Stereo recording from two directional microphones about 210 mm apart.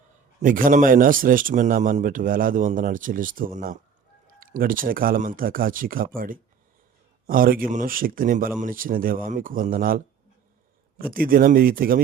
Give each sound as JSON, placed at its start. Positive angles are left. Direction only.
{"t": 0.4, "sound": "a man's voice", "side_deg": -40}